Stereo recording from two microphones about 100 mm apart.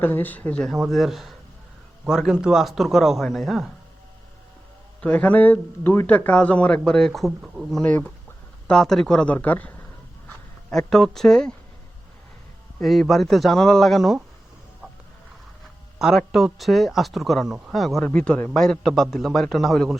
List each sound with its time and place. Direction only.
0.0 s a man's voice: 20° left (ahead or behind)
0.7 s speech: centre (ahead or behind)
4.9 s a man's voice: 15° left (ahead or behind); by 7.7 s 10° right (ahead or behind)
7.7 s a man's voice: 10° left (ahead or behind)
10.7 s speech: 5° left (ahead or behind)
12.8 s speech: centre (ahead or behind)
16.0 s speech: 5° right (ahead or behind)